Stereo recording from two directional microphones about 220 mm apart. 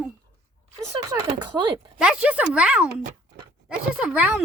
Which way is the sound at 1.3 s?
20° right (ahead or behind).